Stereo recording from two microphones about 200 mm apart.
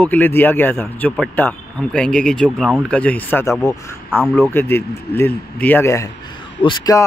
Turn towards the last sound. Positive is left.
turn(degrees=20)  # may be behind; listen again after turning